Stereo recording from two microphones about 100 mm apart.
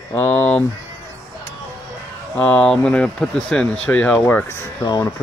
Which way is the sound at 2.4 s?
15° left (ahead or behind).